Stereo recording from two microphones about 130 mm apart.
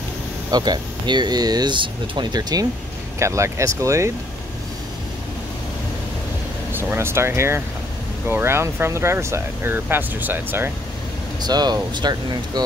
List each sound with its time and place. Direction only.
0.5 s speech: 30° right (ahead or behind)
3.2 s speech: 20° right (ahead or behind)
6.7 s speech: 15° right (ahead or behind)
11.4 s speech: 30° right (ahead or behind)